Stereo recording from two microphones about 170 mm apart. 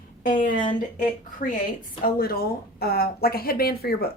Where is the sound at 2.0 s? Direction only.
60° left (ahead or behind).